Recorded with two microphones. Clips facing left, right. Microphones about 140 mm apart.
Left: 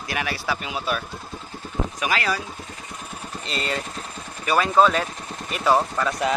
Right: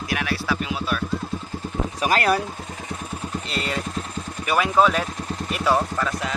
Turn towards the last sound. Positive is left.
turn(degrees=0)  # may be behind; listen again after turning